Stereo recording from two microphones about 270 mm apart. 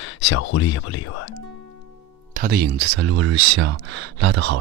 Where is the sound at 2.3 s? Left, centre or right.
Right.